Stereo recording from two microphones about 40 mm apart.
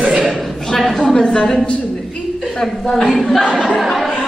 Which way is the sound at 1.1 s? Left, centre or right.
Centre.